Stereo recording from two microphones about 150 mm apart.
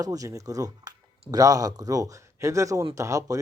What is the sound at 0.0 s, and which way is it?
Speech, 25° right (ahead or behind).